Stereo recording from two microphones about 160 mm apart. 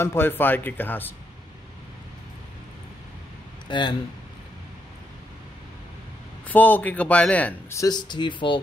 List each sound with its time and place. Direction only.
0.0 s speech: 15° left (ahead or behind)
3.6 s speech: 30° left (ahead or behind)
6.4 s speech: 10° left (ahead or behind)
7.8 s speech: 25° left (ahead or behind)